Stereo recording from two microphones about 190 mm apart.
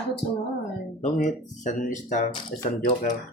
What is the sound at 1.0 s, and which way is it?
Speech, 40° left (ahead or behind).